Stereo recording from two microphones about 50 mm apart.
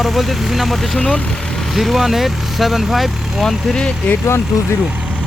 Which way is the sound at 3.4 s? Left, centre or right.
Centre.